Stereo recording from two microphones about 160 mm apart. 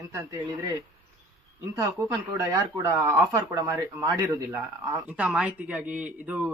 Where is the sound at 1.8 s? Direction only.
15° right (ahead or behind).